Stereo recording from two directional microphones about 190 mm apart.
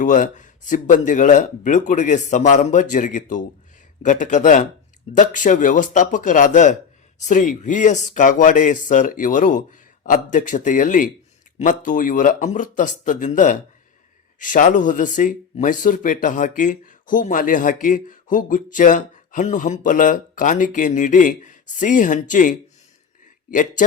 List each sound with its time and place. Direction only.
0.0 s speech: 40° left (ahead or behind)